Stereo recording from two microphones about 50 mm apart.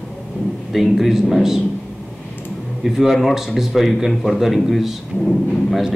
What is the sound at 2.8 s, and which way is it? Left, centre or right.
A man's voice, centre.